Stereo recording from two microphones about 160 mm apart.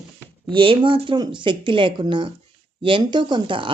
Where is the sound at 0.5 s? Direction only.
35° right (ahead or behind).